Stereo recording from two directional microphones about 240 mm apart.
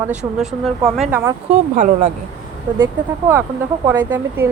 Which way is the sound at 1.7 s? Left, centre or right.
Right.